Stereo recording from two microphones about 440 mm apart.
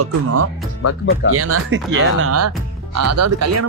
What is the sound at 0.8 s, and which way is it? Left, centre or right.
Speech, left.